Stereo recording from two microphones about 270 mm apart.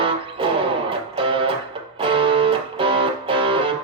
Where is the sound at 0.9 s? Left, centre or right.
Centre.